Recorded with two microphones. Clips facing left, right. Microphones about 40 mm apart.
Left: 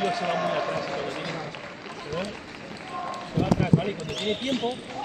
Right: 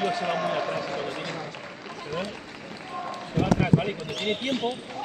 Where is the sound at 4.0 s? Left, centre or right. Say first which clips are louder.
Even; centre.